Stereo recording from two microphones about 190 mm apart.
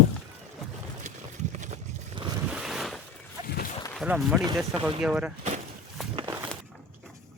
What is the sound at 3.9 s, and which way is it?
Speech, 5° right (ahead or behind).